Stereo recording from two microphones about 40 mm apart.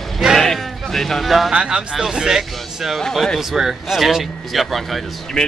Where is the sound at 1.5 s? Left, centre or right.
Right; by 5.0 s centre.